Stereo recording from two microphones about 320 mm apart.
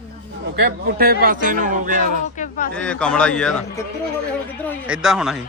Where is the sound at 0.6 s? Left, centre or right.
Right.